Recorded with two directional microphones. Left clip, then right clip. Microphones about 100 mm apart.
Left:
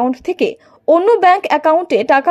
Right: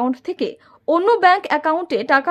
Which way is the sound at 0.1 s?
25° left (ahead or behind).